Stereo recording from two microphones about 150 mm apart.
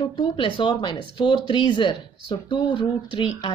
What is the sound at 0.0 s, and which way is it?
Speech, 35° left (ahead or behind).